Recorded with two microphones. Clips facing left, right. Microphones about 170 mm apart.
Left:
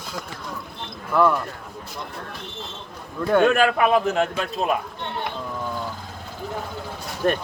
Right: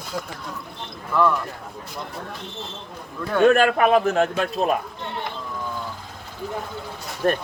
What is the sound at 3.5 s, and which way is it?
Speech, 45° right (ahead or behind).